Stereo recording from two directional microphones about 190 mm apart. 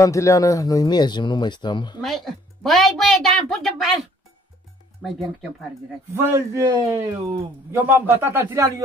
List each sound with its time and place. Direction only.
0.0 s speech: 15° left (ahead or behind)
2.0 s a woman's voice: centre (ahead or behind)
5.0 s a woman's voice: 5° left (ahead or behind)
6.1 s speech: 15° right (ahead or behind)